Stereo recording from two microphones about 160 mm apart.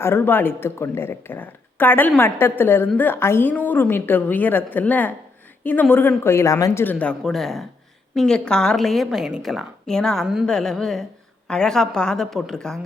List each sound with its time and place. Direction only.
0.0 s a woman's voice: 15° left (ahead or behind)